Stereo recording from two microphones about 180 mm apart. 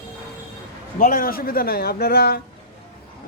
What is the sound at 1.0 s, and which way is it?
Speech, 50° left (ahead or behind).